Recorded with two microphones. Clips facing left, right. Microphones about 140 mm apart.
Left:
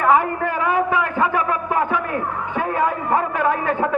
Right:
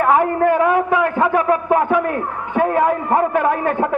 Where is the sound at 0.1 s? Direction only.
50° right (ahead or behind).